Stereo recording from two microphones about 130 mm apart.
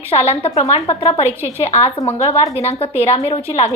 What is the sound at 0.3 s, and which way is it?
Speech, 55° left (ahead or behind).